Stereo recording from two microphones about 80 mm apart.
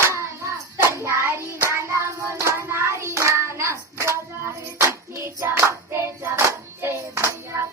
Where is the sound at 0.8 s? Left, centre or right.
Right.